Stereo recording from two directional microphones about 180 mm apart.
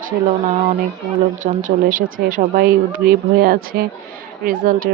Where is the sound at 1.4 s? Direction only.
45° right (ahead or behind).